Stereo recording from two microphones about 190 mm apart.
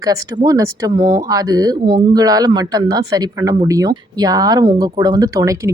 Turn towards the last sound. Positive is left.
turn(degrees=-15)  # may be behind; listen again after turning